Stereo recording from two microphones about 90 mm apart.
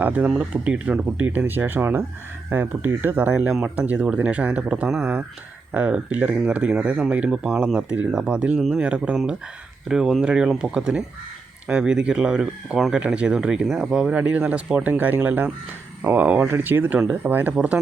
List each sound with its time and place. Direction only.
0.0 s speech: 15° right (ahead or behind)